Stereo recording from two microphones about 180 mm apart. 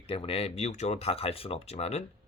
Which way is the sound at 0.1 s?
35° left (ahead or behind).